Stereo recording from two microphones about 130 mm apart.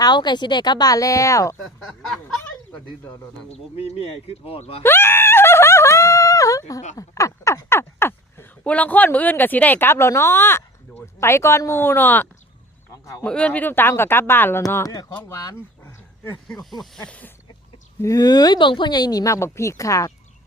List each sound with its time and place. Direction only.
0.0 s speech: 35° left (ahead or behind)
1.8 s a sound: centre (ahead or behind)
3.5 s speech: 50° left (ahead or behind)
4.8 s groan: 15° left (ahead or behind)
6.9 s speech: 25° left (ahead or behind)
16.8 s speech: 5° left (ahead or behind)
18.0 s speech: 25° left (ahead or behind)